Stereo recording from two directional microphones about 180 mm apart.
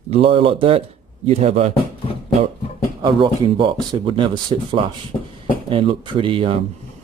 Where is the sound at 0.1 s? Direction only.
30° right (ahead or behind).